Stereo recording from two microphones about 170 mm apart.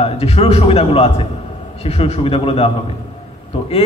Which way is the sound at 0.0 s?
35° left (ahead or behind).